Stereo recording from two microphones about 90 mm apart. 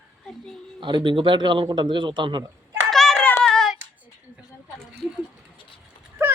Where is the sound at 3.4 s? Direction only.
5° left (ahead or behind).